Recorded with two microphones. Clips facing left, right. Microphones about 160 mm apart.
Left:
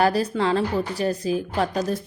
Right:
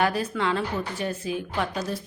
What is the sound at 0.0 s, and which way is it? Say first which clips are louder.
A woman's voice: left 4 dB; 35° left (ahead or behind).